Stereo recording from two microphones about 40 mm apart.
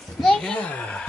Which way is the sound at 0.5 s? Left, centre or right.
Left.